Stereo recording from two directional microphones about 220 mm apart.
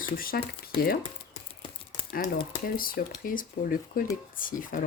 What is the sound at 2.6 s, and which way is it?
Speech, 40° left (ahead or behind).